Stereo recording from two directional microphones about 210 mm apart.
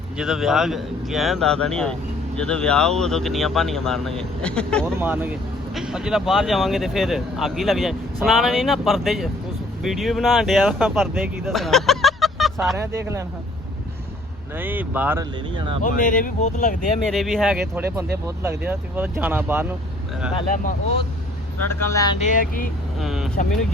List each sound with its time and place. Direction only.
0.2 s a man's voice: centre (ahead or behind)
4.9 s a man's voice: 10° right (ahead or behind)
13.0 s speech: 15° right (ahead or behind)
14.6 s speech: 10° right (ahead or behind)
15.5 s speech: 25° right (ahead or behind)
15.8 s speech: 40° left (ahead or behind)
17.1 s a man's voice: centre (ahead or behind)
21.7 s speech: 10° left (ahead or behind)
22.2 s speech: 40° left (ahead or behind)
23.0 s a man's voice: centre (ahead or behind)